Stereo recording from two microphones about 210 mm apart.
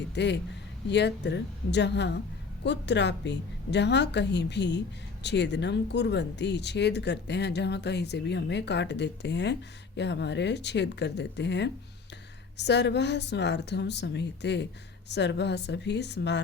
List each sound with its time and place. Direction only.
0.1 s speech: 55° left (ahead or behind)